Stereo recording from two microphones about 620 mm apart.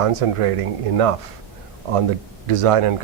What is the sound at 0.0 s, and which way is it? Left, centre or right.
Speech, right.